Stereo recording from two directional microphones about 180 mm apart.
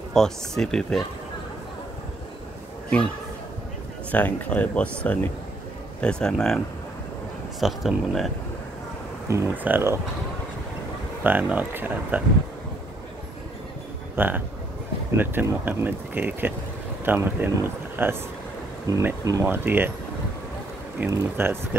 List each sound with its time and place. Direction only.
0.1 s speech: centre (ahead or behind)
4.1 s speech: 10° left (ahead or behind)
7.6 s speech: centre (ahead or behind)
9.3 s speech: 10° right (ahead or behind)
11.2 s speech: 10° right (ahead or behind)
14.1 s speech: 10° right (ahead or behind)
21.0 s speech: 10° right (ahead or behind)